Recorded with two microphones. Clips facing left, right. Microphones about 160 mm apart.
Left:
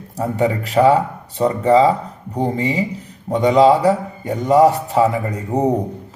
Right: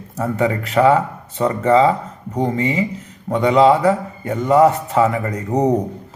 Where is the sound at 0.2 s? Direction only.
35° left (ahead or behind).